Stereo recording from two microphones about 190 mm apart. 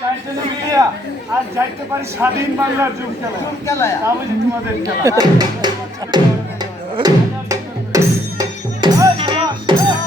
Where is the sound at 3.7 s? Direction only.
15° left (ahead or behind).